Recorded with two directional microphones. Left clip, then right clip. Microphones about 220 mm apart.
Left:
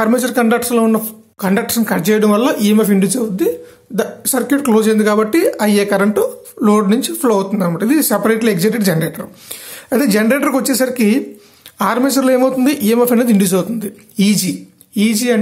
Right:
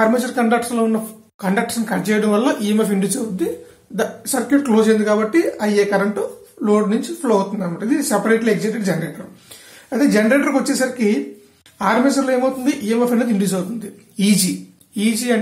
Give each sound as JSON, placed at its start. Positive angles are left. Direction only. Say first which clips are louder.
{"t": 0.0, "sound": "speech", "louder": "left 3 dB", "side_deg": 40}